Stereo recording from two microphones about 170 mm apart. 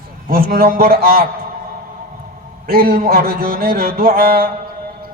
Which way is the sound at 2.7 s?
55° right (ahead or behind).